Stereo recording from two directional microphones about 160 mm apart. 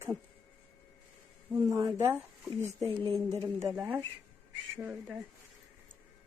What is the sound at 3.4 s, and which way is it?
Speech, 20° right (ahead or behind).